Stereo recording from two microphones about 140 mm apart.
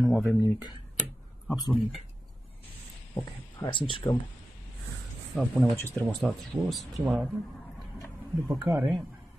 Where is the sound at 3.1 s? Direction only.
35° left (ahead or behind).